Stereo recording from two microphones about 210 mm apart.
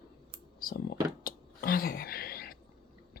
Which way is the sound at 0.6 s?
45° left (ahead or behind).